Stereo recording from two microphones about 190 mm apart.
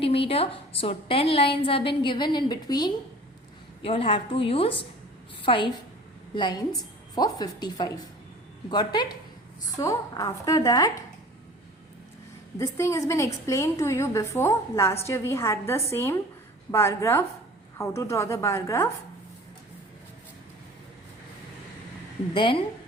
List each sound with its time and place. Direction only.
0.0 s a woman's voice: 30° left (ahead or behind)
12.5 s a woman's voice: 15° left (ahead or behind)
22.4 s a woman's voice: 25° left (ahead or behind)